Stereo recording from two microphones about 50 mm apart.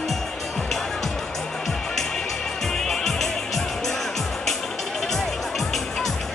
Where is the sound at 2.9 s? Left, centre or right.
Centre.